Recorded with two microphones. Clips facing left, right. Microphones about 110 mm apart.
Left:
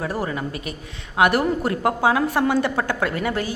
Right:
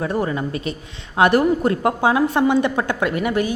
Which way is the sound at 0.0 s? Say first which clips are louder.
Right 4 dB; 25° right (ahead or behind).